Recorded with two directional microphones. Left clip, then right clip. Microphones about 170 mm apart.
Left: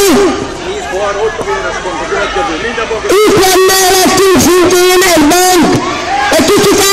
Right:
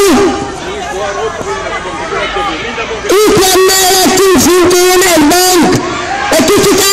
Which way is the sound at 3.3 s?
40° right (ahead or behind).